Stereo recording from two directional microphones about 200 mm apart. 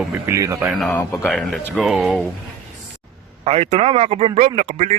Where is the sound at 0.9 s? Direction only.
15° left (ahead or behind).